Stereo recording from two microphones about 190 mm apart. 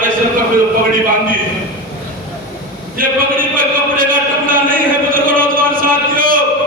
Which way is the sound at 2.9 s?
45° right (ahead or behind).